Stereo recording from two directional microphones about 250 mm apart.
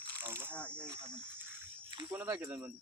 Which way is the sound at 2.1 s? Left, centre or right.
Centre.